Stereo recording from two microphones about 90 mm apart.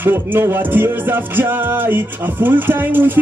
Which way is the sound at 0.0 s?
25° right (ahead or behind).